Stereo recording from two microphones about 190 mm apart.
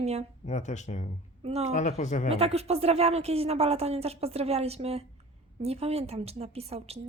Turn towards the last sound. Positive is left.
turn(degrees=-35)  # may be behind; listen again after turning